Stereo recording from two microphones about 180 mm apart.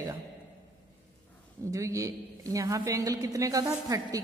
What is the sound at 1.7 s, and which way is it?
A man's voice, 15° right (ahead or behind).